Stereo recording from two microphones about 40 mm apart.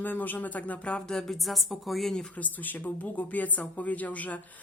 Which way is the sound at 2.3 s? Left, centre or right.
Left.